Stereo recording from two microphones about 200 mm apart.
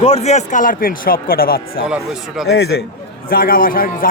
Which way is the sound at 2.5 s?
55° left (ahead or behind).